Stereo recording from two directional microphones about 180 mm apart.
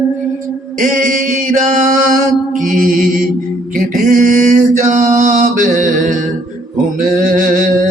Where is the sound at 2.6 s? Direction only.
50° right (ahead or behind).